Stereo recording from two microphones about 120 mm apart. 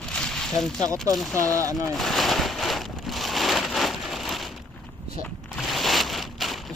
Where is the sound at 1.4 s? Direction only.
30° right (ahead or behind).